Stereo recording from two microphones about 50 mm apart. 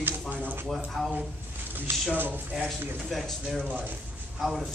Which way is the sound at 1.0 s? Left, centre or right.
Centre.